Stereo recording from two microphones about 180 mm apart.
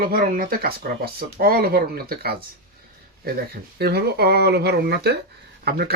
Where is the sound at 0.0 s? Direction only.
55° right (ahead or behind).